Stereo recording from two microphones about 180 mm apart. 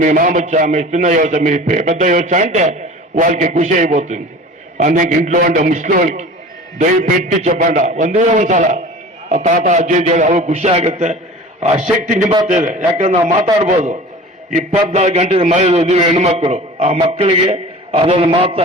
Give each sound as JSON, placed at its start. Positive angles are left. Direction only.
{"t": 0.0, "sound": "a man's voice", "side_deg": -45}